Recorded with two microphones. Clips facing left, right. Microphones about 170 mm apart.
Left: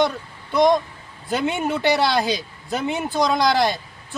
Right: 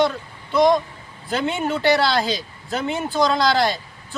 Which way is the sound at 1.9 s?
15° left (ahead or behind).